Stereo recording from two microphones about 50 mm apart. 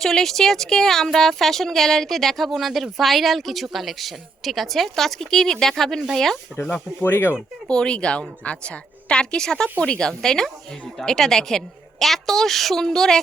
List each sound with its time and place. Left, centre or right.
0.0 s speech: centre
7.0 s speech: left
7.7 s a woman's voice: centre